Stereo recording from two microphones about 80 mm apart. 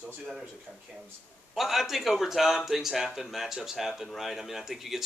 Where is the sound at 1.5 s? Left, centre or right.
Centre.